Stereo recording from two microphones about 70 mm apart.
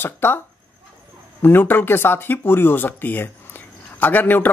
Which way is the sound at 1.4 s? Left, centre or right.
Left.